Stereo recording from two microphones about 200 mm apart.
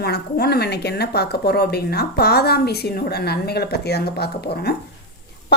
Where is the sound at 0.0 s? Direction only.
50° left (ahead or behind).